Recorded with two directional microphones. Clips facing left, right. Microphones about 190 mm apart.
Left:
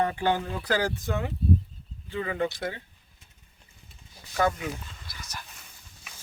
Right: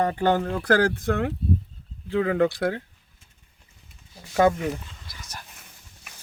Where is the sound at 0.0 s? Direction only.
40° right (ahead or behind); by 1.3 s 60° right (ahead or behind).